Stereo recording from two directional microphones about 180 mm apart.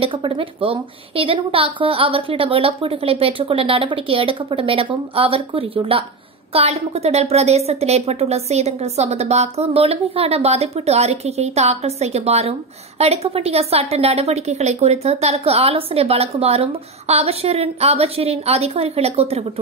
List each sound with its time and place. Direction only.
0.0 s a woman's voice: 30° right (ahead or behind)